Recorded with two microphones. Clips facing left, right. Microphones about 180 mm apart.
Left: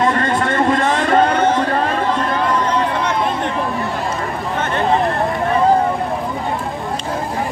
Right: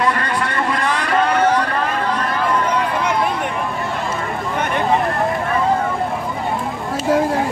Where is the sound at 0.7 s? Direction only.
25° left (ahead or behind).